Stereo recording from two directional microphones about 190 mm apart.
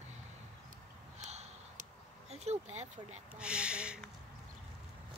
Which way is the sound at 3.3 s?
5° right (ahead or behind).